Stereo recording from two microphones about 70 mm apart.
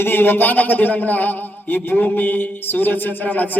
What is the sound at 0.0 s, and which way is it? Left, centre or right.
A man's voice, left.